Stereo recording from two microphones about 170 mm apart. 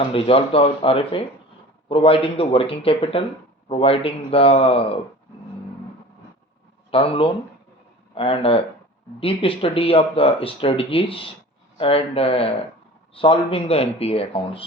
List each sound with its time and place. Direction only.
0.1 s speech: 35° left (ahead or behind)
6.9 s speech: 35° left (ahead or behind)